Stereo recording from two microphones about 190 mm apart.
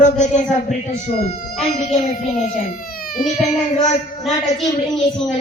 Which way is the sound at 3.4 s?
40° left (ahead or behind).